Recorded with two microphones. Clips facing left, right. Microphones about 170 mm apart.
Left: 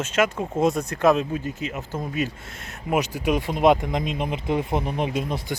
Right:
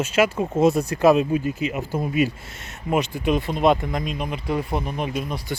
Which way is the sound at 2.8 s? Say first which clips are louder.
Right 1 dB; 10° left (ahead or behind).